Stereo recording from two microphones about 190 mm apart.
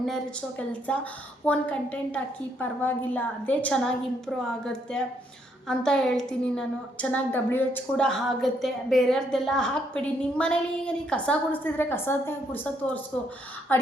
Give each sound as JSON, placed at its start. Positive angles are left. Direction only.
{"t": 0.7, "sound": "a woman's voice", "side_deg": 5}